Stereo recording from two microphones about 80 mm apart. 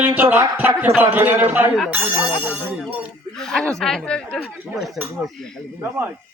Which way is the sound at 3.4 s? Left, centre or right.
Centre.